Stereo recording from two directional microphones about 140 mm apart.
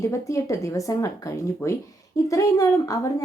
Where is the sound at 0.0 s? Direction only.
20° left (ahead or behind).